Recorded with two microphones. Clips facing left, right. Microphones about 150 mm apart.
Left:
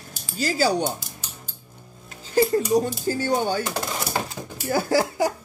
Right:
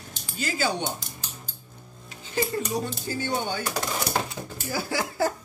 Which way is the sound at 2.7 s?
40° left (ahead or behind).